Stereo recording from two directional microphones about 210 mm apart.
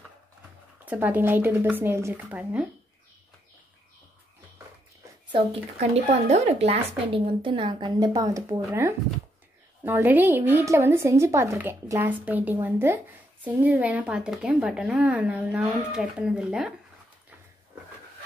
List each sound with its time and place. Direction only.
0.8 s speech: 10° right (ahead or behind)
5.3 s a woman's voice: 30° right (ahead or behind)
9.8 s speech: 10° right (ahead or behind)